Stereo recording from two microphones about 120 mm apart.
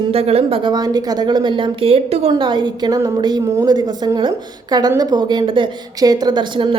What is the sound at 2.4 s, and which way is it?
Speech, 40° right (ahead or behind).